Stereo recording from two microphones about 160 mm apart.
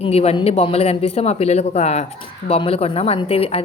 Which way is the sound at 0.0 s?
40° left (ahead or behind).